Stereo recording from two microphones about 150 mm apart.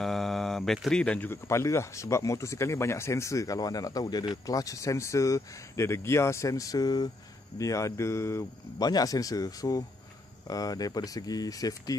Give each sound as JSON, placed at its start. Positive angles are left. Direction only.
{"t": 0.0, "sound": "speech", "side_deg": 0}